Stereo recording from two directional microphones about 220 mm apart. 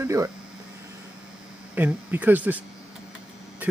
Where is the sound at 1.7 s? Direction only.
5° right (ahead or behind).